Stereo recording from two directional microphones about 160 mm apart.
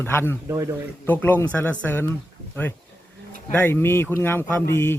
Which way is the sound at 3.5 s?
10° left (ahead or behind).